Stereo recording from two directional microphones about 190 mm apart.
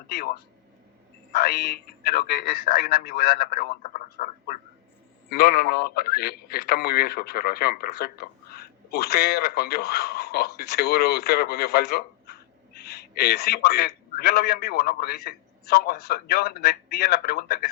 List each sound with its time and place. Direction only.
0.1 s a man's voice: 55° left (ahead or behind)